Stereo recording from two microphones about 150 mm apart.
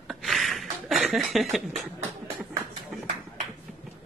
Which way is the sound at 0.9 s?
Centre (ahead or behind).